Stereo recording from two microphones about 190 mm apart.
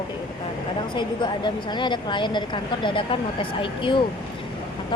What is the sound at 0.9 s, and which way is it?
A woman's voice, 25° left (ahead or behind).